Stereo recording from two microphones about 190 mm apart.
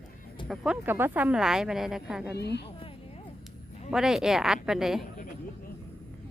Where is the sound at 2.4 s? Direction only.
60° left (ahead or behind).